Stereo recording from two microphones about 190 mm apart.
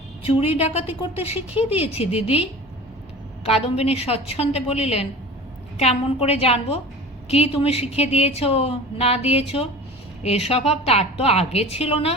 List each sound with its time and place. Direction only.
0.3 s a woman's voice: 30° left (ahead or behind)
1.4 s speech: 5° right (ahead or behind)
1.7 s a woman's voice: 30° left (ahead or behind)